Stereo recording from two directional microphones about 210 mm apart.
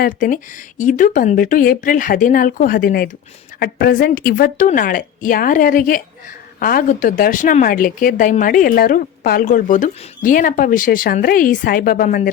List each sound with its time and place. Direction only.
0.0 s a woman's voice: 40° left (ahead or behind)